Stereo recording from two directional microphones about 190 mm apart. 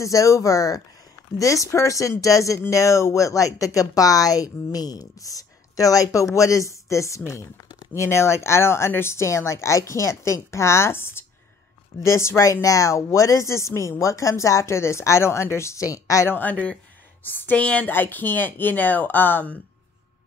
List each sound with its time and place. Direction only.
0.0 s speech: 15° left (ahead or behind)